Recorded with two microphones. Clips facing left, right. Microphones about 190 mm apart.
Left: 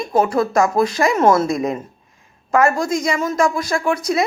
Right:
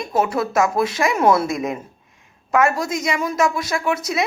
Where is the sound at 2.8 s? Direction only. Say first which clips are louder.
Left 3 dB; centre (ahead or behind).